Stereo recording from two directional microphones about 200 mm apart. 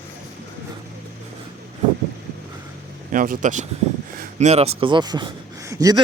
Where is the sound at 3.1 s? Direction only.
40° right (ahead or behind).